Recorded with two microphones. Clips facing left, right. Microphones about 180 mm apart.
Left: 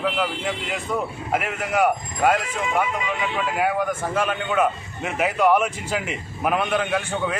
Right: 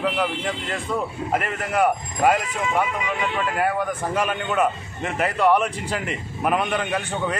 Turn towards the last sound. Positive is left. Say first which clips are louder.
# left 1 dB
turn(degrees=0)  # may be behind; listen again after turning